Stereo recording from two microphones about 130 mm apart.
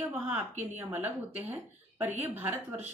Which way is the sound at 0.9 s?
15° right (ahead or behind).